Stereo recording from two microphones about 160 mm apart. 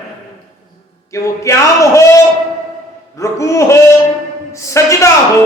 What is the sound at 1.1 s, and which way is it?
A man's voice, 20° left (ahead or behind).